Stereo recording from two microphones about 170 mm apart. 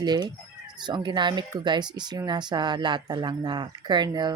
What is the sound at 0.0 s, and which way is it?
Speech, 25° right (ahead or behind).